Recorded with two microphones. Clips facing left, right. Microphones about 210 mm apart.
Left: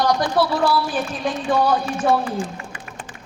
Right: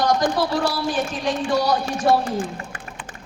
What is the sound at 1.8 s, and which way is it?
A woman's voice, 45° right (ahead or behind).